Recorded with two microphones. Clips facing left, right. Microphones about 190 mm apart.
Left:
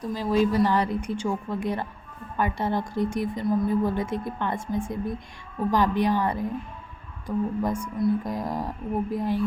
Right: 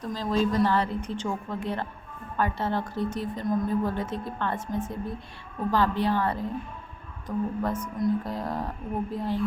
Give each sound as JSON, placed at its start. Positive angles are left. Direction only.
{"t": 0.0, "sound": "a woman's voice", "side_deg": 10}